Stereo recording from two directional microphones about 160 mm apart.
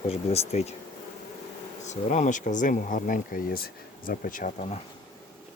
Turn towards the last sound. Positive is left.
turn(degrees=55)  # may be behind; listen again after turning